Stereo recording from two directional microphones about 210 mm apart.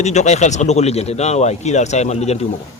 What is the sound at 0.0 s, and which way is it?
A man's voice, 35° left (ahead or behind).